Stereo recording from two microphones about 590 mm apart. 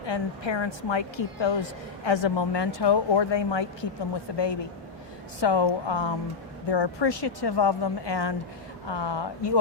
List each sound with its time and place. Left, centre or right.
0.0 s a woman's voice: left